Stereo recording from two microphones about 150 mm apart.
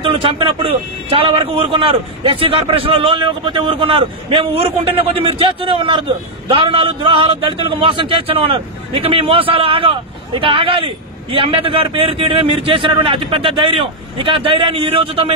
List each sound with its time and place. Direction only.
0.0 s a man's voice: 35° right (ahead or behind)